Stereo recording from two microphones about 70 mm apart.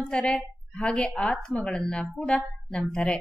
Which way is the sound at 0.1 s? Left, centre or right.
Centre.